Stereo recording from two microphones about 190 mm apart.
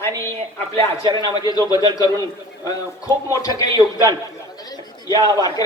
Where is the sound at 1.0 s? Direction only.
25° right (ahead or behind).